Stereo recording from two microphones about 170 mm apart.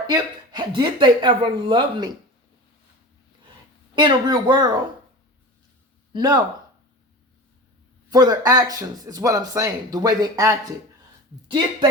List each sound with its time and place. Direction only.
0.1 s speech: 25° right (ahead or behind)
3.9 s speech: 25° right (ahead or behind)
6.1 s speech: 25° right (ahead or behind)
8.1 s speech: 20° right (ahead or behind)